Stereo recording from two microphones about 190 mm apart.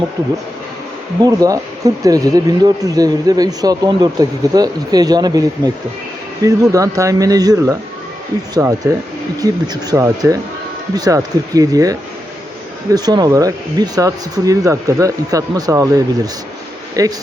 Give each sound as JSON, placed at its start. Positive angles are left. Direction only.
{"t": 1.2, "sound": "speech", "side_deg": -20}